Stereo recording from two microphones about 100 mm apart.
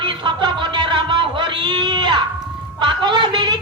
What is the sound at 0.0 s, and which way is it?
Music, 50° right (ahead or behind).